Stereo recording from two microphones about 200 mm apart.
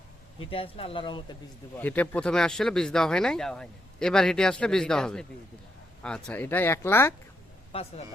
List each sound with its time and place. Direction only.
0.5 s speech: 30° left (ahead or behind)
1.7 s speech: 10° left (ahead or behind)
7.7 s speech: 30° left (ahead or behind)